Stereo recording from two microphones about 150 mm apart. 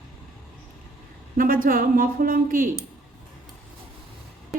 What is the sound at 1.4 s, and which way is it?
A woman's voice, 65° right (ahead or behind).